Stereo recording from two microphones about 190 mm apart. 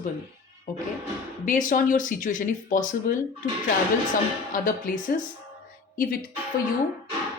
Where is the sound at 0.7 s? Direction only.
45° left (ahead or behind).